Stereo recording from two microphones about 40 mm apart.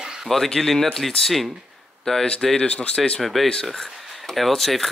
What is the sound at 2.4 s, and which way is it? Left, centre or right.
Speech, centre.